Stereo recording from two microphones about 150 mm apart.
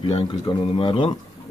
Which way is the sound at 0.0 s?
35° left (ahead or behind).